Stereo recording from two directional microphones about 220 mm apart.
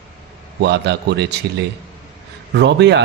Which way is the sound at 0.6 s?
50° right (ahead or behind).